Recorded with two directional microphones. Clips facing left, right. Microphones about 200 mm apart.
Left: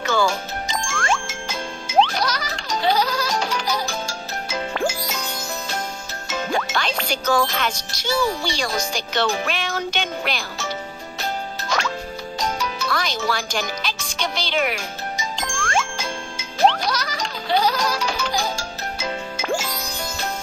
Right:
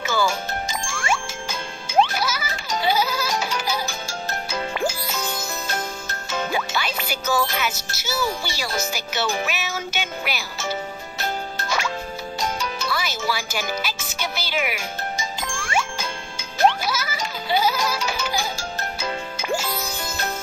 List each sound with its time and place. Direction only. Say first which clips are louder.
0.0 s music: left 2 dB; 5° right (ahead or behind)
0.7 s jingle: left 4 dB; 10° right (ahead or behind)
2.0 s music: left 1 dB; 5° right (ahead or behind)
6.5 s a child's voice: left 6 dB; 5° right (ahead or behind)
12.8 s speech: left 3 dB; 5° right (ahead or behind)
15.3 s jingle: left 3 dB; 5° right (ahead or behind)
16.6 s music: left 1 dB; 5° right (ahead or behind)